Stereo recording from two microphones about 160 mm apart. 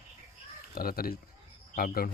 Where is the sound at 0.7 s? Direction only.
65° left (ahead or behind).